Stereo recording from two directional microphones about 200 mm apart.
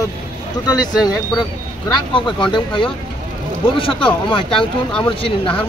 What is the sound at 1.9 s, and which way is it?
Speech, 25° left (ahead or behind).